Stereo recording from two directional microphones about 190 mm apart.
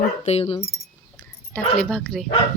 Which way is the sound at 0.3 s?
30° left (ahead or behind).